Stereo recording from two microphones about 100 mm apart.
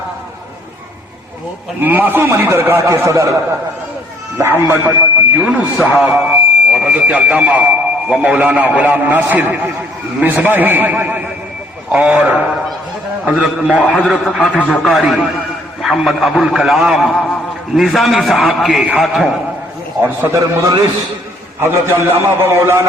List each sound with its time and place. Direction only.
1.8 s a man's voice: 20° right (ahead or behind)
4.4 s a man's voice: 25° right (ahead or behind); by 19.3 s centre (ahead or behind)
20.0 s a man's voice: 20° right (ahead or behind)
21.6 s a man's voice: 25° right (ahead or behind)